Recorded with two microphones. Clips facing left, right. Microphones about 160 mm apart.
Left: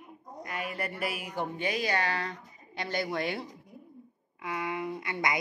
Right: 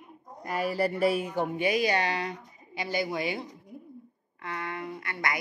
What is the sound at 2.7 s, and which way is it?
Speech, 5° right (ahead or behind).